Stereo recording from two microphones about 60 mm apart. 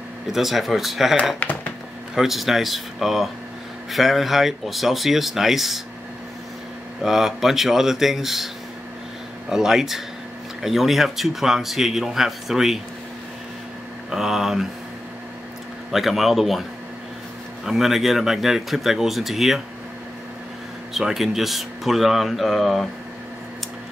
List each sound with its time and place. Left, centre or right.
0.3 s speech: centre
1.4 s a sound: left
2.1 s speech: centre
7.0 s speech: centre
9.5 s speech: centre
14.1 s speech: centre
15.9 s speech: centre
17.6 s speech: centre
20.9 s speech: centre